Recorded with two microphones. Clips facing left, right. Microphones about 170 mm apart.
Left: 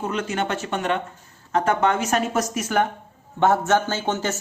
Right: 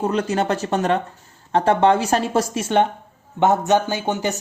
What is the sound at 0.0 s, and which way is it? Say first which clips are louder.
A woman's voice: right 5 dB; 35° right (ahead or behind).